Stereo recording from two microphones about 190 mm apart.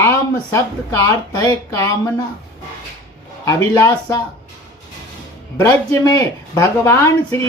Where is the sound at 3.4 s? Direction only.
15° left (ahead or behind).